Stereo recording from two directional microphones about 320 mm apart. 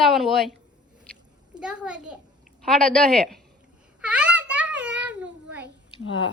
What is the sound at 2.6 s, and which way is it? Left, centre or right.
Speech, centre.